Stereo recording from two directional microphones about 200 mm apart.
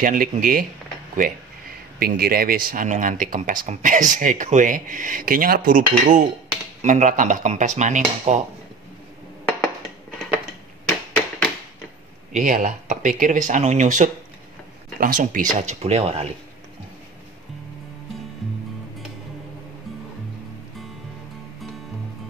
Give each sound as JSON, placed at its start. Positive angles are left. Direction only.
{"t": 0.0, "sound": "speech", "side_deg": -40}
{"t": 2.0, "sound": "speech", "side_deg": -50}
{"t": 12.3, "sound": "speech", "side_deg": -40}